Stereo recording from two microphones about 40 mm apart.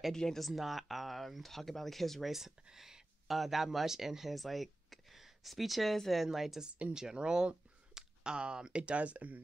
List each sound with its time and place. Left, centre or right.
0.1 s speech: centre
0.4 s speech: centre
6.2 s a woman's voice: centre
6.6 s speech: right